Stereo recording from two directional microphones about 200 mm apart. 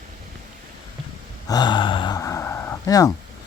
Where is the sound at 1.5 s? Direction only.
20° left (ahead or behind).